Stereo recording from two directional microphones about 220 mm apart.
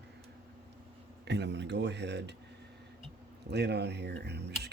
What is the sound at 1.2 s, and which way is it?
Speech, 50° right (ahead or behind).